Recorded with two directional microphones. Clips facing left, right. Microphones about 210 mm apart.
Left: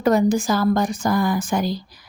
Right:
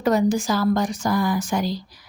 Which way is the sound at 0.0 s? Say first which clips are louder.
Left 2 dB; 50° left (ahead or behind).